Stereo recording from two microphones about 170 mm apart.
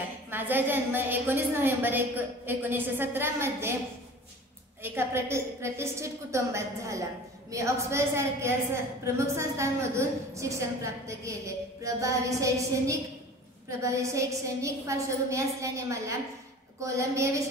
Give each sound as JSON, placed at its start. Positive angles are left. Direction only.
{"t": 0.3, "sound": "a woman's voice", "side_deg": -10}
{"t": 4.8, "sound": "a woman's voice", "side_deg": -15}